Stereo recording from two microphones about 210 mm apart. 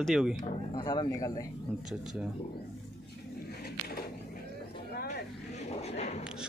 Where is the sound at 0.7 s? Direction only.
20° left (ahead or behind).